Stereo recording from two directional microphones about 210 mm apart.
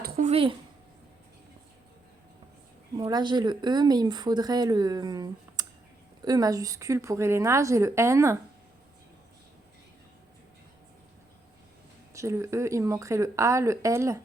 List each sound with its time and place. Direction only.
0.0 s a sound: 35° right (ahead or behind)
3.0 s a woman's voice: 20° right (ahead or behind)
12.1 s a woman's voice: 15° right (ahead or behind)